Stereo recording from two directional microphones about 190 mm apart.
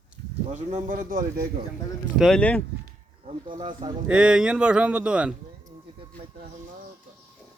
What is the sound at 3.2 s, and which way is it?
Speech, 30° right (ahead or behind).